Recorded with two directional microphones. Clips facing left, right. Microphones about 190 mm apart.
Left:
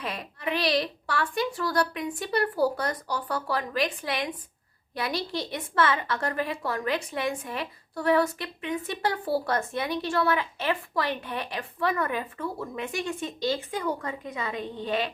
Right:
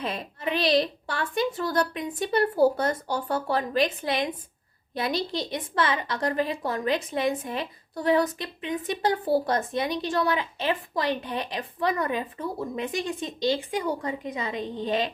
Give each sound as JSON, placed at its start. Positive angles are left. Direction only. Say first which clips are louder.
{"t": 0.0, "sound": "a woman's voice", "louder": "right 2 dB", "side_deg": -25}